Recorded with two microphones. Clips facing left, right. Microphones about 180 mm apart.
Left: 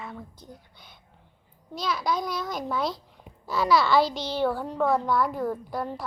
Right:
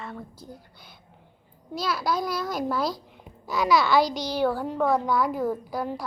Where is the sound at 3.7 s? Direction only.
Centre (ahead or behind).